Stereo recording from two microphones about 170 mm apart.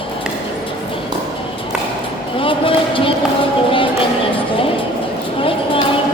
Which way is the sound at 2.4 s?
30° left (ahead or behind).